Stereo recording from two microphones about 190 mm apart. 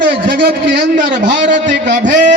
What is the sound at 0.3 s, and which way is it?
Speech, 55° right (ahead or behind).